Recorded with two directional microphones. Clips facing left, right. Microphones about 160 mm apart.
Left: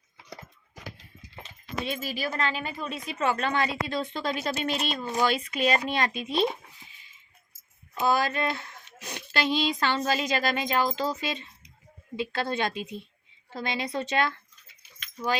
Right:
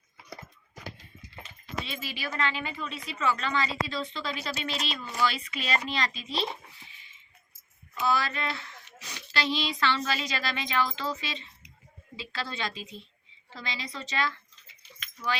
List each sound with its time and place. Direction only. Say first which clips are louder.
1.8 s speech: left 7 dB; 50° left (ahead or behind)
8.0 s a woman's voice: left 3 dB; 50° left (ahead or behind)